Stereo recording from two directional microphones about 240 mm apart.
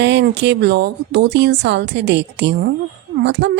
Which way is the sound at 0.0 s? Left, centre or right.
Right.